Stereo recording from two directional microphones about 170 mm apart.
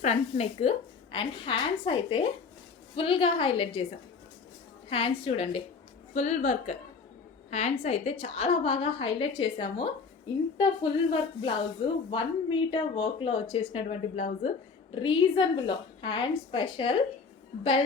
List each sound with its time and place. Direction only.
0.0 s a woman's voice: 40° left (ahead or behind)
4.9 s a woman's voice: 35° left (ahead or behind)